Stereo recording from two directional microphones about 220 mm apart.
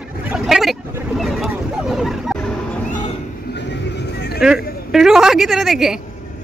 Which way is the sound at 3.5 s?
50° left (ahead or behind).